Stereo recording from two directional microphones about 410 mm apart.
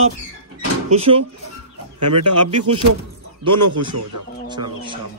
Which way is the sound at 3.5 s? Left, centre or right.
Right.